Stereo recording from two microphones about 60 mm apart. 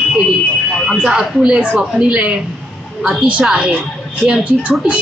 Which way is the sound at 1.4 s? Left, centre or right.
Centre.